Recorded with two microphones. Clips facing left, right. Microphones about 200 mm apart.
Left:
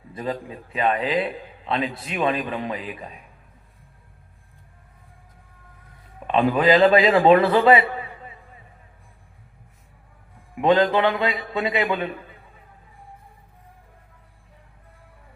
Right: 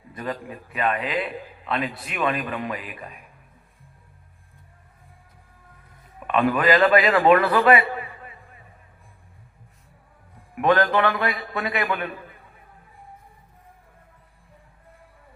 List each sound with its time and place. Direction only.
0.1 s a man's voice: 20° left (ahead or behind)
6.2 s a man's voice: 25° left (ahead or behind)
10.6 s a man's voice: 20° left (ahead or behind)